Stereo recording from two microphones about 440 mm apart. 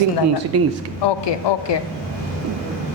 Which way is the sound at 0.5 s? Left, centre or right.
Right.